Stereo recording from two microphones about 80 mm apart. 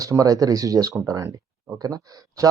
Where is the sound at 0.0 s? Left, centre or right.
Right.